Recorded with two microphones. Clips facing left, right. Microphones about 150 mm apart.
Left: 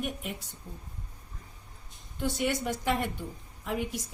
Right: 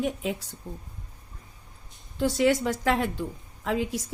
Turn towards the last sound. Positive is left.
turn(degrees=-90)